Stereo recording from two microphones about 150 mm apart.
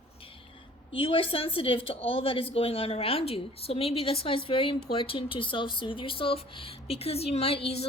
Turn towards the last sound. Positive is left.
turn(degrees=40)  # may be behind; listen again after turning